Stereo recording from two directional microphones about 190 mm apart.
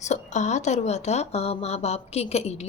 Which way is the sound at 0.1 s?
40° left (ahead or behind).